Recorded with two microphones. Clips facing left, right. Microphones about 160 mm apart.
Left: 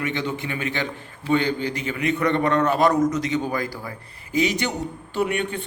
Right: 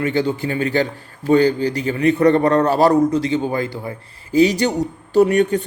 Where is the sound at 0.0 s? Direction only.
35° right (ahead or behind).